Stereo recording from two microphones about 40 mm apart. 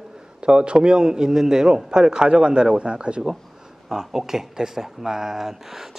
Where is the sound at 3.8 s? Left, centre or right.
Centre.